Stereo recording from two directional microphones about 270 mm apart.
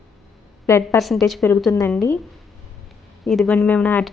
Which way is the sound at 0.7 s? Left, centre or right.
Centre.